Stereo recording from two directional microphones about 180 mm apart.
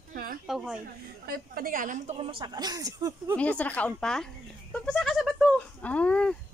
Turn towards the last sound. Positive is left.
turn(degrees=5)  # may be behind; listen again after turning